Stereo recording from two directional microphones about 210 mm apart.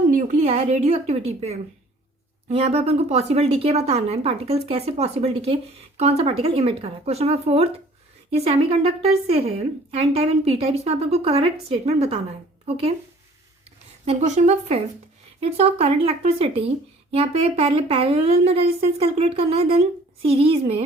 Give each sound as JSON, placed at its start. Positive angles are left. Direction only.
{"t": 0.1, "sound": "a woman's voice", "side_deg": -35}
{"t": 14.0, "sound": "a woman's voice", "side_deg": -30}